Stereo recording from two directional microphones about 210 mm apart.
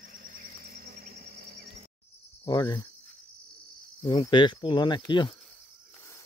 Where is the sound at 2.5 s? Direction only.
20° left (ahead or behind).